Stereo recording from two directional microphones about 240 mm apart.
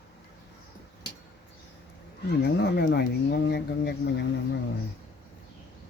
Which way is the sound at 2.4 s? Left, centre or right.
Left.